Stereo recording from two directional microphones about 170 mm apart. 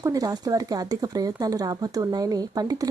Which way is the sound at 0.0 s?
20° right (ahead or behind).